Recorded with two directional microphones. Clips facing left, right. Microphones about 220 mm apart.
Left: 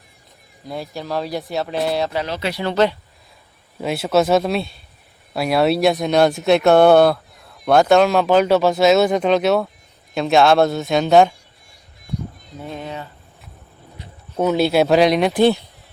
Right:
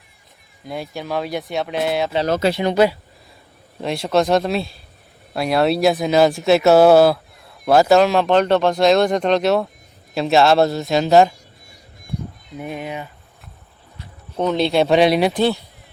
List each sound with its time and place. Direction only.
0.6 s speech: centre (ahead or behind)
2.2 s speech: 45° right (ahead or behind)
2.5 s speech: 15° right (ahead or behind)
3.8 s speech: 5° left (ahead or behind)
12.5 s speech: 15° right (ahead or behind)
14.3 s speech: 5° left (ahead or behind)
15.4 s speech: 20° left (ahead or behind)